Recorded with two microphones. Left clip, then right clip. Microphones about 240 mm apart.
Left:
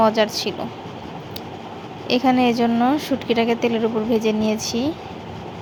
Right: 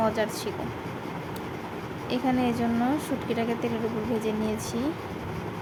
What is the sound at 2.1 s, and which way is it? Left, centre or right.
A woman's voice, centre.